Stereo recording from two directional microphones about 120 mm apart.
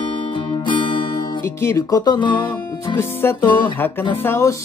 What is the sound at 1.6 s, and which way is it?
Music, 25° left (ahead or behind).